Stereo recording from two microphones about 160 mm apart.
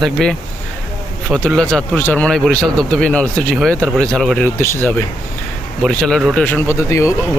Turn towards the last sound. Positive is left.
turn(degrees=20)  # may be behind; listen again after turning